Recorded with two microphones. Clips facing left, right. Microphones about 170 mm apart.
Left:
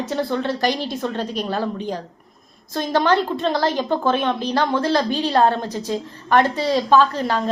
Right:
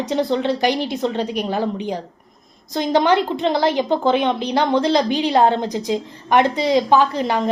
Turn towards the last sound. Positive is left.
turn(degrees=-15)  # may be behind; listen again after turning